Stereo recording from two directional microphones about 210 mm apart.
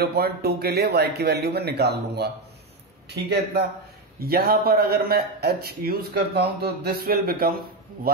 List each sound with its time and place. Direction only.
0.0 s speech: 50° right (ahead or behind)